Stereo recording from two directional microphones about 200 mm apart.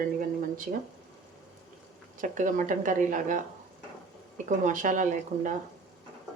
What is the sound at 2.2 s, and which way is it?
Speech, 40° right (ahead or behind).